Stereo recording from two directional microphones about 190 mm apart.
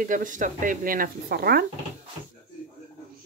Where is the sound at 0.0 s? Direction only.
45° right (ahead or behind).